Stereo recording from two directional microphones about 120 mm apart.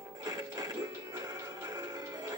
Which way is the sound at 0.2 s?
35° right (ahead or behind).